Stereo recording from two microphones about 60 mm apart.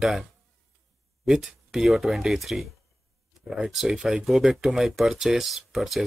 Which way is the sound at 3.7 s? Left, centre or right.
Centre.